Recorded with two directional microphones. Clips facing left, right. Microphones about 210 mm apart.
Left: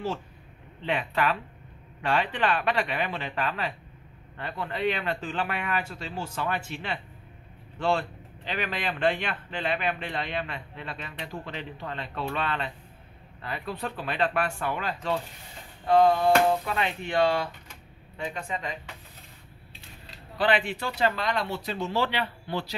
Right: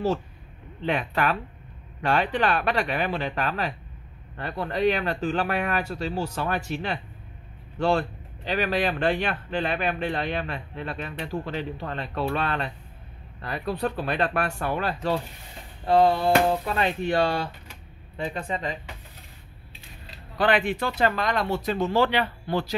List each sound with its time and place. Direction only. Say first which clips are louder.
0.8 s speech: right 2 dB; 45° right (ahead or behind)
20.3 s speech: right 3 dB; 50° right (ahead or behind)